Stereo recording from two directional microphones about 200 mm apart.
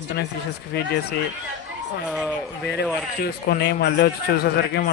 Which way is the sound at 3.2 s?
55° left (ahead or behind).